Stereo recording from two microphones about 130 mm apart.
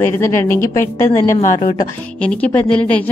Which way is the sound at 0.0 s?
20° left (ahead or behind).